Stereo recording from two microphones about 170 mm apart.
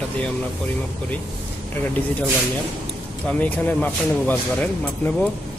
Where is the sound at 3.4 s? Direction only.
10° left (ahead or behind).